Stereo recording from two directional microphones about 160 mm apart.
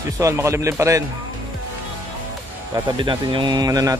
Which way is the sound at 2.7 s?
30° right (ahead or behind).